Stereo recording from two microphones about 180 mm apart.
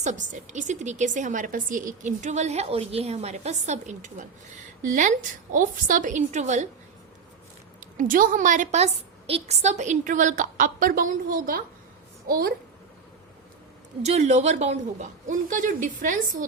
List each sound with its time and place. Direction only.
0.0 s a woman's voice: 45° right (ahead or behind)
5.5 s a woman's voice: 45° right (ahead or behind)
7.8 s a woman's voice: 45° right (ahead or behind)
14.0 s a woman's voice: 40° right (ahead or behind)